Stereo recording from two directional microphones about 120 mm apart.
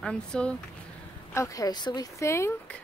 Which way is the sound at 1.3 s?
25° left (ahead or behind).